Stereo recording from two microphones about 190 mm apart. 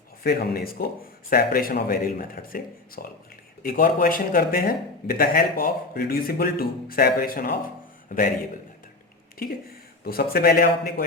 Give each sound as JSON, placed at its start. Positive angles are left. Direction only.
{"t": 0.2, "sound": "a man's voice", "side_deg": 55}
{"t": 10.0, "sound": "a man's voice", "side_deg": 55}